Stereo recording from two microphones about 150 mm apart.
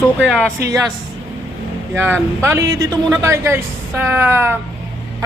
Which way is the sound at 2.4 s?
20° right (ahead or behind).